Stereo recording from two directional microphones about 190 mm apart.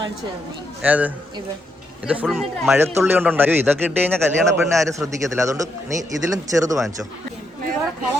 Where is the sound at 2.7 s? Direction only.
15° right (ahead or behind).